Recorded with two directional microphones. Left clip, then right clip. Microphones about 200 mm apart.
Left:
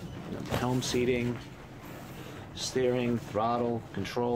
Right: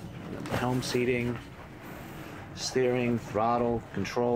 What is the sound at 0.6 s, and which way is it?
Speech, centre (ahead or behind).